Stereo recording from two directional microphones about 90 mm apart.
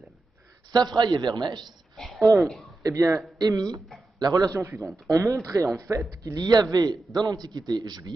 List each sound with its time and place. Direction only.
0.7 s speech: 50° right (ahead or behind)
2.0 s a sound: centre (ahead or behind)
2.8 s a man's voice: 35° right (ahead or behind)